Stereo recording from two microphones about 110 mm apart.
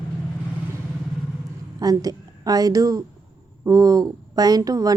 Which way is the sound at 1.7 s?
35° right (ahead or behind).